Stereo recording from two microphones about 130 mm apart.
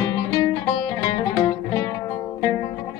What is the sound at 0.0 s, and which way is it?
Music, 25° left (ahead or behind).